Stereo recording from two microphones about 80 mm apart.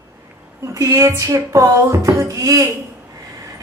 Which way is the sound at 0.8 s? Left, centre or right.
Right.